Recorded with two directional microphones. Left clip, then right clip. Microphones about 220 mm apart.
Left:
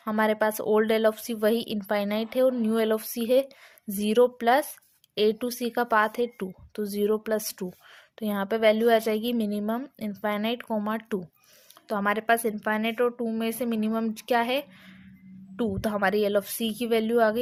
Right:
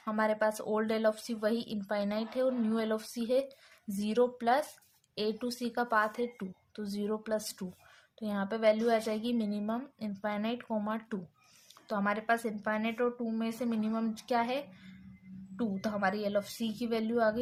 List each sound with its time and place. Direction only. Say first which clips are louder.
0.0 s speech: left 6 dB; 30° left (ahead or behind)